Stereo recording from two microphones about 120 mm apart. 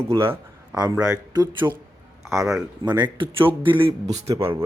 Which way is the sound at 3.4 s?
45° right (ahead or behind).